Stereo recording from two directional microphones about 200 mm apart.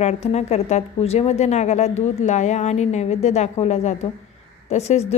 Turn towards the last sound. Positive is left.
turn(degrees=35)  # may be behind; listen again after turning